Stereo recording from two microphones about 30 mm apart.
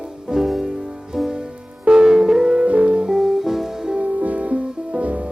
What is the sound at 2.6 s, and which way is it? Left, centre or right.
Music, right.